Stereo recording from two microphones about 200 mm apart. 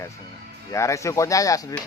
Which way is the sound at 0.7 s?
15° left (ahead or behind).